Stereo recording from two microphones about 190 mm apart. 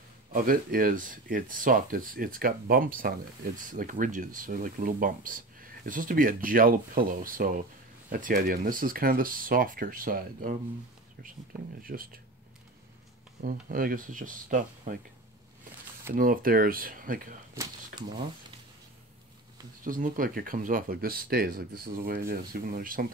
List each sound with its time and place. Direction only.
0.3 s speech: 50° right (ahead or behind)
11.8 s speech: 50° right (ahead or behind)
13.4 s speech: 45° right (ahead or behind)
16.2 s speech: 50° right (ahead or behind)
19.8 s speech: 45° right (ahead or behind)